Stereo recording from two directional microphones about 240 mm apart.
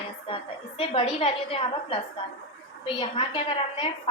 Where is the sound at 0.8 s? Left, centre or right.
Left.